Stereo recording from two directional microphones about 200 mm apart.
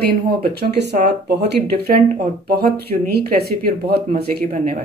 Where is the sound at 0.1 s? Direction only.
55° right (ahead or behind).